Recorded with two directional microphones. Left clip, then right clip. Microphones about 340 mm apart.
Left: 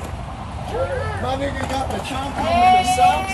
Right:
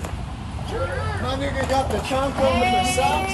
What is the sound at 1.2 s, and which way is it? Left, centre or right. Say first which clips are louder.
Speech: left 2 dB; centre.